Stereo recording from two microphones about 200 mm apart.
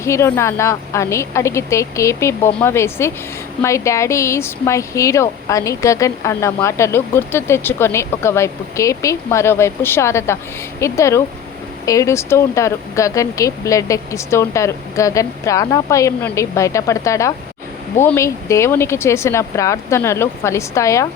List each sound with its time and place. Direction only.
0.0 s speech: 15° left (ahead or behind)